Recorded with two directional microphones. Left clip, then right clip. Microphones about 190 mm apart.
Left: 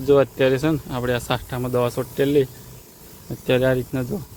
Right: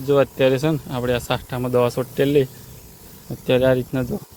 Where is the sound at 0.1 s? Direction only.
Centre (ahead or behind).